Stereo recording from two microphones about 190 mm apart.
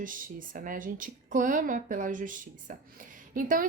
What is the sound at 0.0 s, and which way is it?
A woman's voice, 45° right (ahead or behind).